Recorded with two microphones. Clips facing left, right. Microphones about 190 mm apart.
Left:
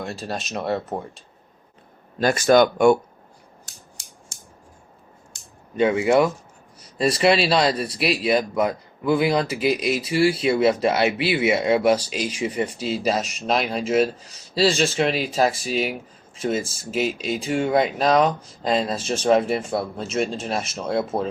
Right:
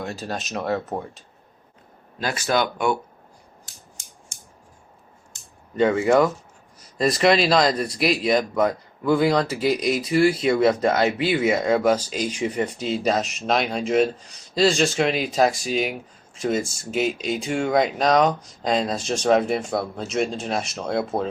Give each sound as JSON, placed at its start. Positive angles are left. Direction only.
{"t": 0.3, "sound": "speech", "side_deg": 0}
{"t": 2.1, "sound": "speech", "side_deg": 45}
{"t": 5.7, "sound": "speech", "side_deg": 15}
{"t": 9.8, "sound": "speech", "side_deg": 5}
{"t": 10.2, "sound": "speech", "side_deg": 30}
{"t": 10.7, "sound": "speech", "side_deg": 10}